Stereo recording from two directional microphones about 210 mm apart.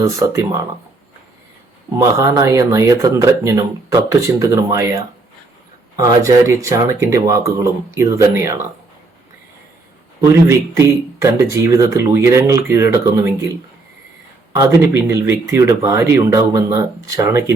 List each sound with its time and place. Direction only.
0.0 s speech: 15° right (ahead or behind)
2.0 s speech: 15° right (ahead or behind)
10.2 s speech: 15° right (ahead or behind)
14.5 s speech: 15° right (ahead or behind)